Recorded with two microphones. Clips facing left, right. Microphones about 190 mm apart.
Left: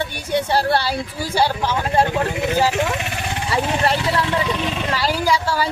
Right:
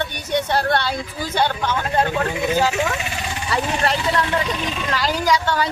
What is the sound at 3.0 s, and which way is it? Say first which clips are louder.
Vehicle: left 1 dB; 55° left (ahead or behind).